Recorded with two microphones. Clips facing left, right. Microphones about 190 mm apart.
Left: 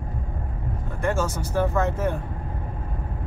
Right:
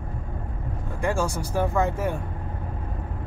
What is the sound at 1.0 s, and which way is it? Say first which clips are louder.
Speech: even; 10° right (ahead or behind).